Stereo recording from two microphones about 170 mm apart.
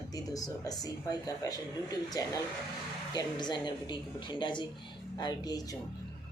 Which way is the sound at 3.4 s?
25° left (ahead or behind).